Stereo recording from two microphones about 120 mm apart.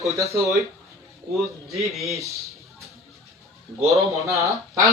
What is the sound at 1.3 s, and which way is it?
Speech, centre (ahead or behind).